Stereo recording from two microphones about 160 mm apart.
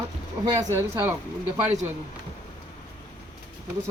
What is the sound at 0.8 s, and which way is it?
Speech, 15° right (ahead or behind).